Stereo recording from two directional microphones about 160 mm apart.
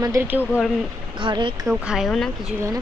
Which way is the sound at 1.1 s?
30° right (ahead or behind).